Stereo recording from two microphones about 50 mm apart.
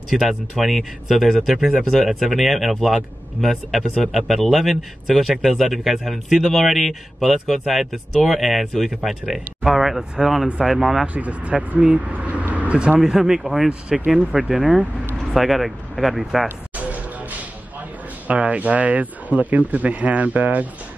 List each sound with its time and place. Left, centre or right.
0.1 s speech: centre
11.1 s speech: right
12.1 s vehicle: right
13.0 s speech: centre
16.7 s music: right
18.2 s speech: right